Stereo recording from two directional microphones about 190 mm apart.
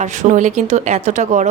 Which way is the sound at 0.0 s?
40° right (ahead or behind).